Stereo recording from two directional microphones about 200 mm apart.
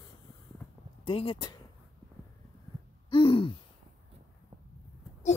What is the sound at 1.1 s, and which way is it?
Speech, 25° left (ahead or behind).